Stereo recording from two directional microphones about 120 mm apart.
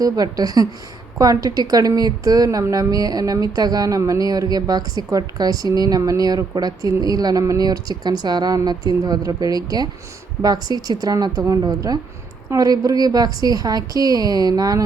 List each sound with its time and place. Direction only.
0.0 s a woman's voice: 30° right (ahead or behind)